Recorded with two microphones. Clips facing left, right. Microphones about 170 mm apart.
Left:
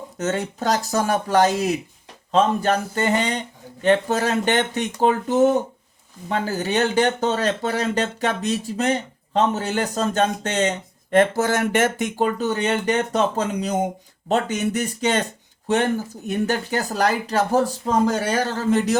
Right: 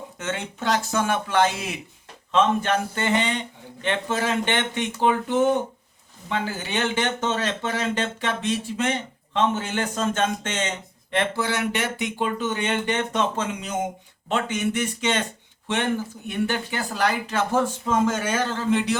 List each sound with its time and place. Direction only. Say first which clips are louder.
0.2 s speech: left 6 dB; 40° left (ahead or behind)